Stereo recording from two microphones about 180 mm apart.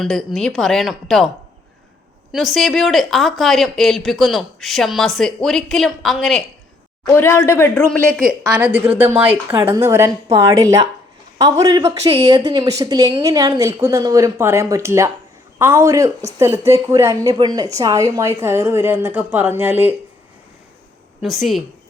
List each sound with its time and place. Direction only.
0.0 s speech: centre (ahead or behind)
2.3 s speech: centre (ahead or behind)
7.0 s a woman's voice: 15° left (ahead or behind); by 19.9 s 10° right (ahead or behind)
21.2 s speech: centre (ahead or behind)